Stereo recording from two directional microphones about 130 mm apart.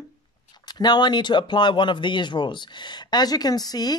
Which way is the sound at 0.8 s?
35° left (ahead or behind).